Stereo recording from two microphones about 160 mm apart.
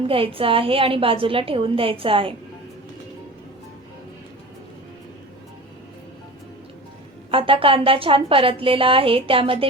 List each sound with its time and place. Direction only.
0.1 s a woman's voice: 35° right (ahead or behind)
7.3 s a woman's voice: 35° right (ahead or behind)